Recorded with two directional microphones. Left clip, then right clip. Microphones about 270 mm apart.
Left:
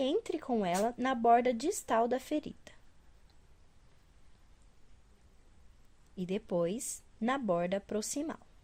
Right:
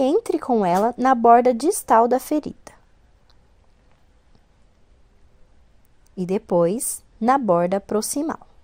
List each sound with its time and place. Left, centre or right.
0.0 s speech: right
6.1 s speech: centre